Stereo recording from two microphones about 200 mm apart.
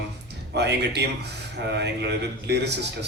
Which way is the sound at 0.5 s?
55° right (ahead or behind).